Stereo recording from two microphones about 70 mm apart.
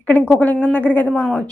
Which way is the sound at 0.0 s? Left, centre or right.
Left.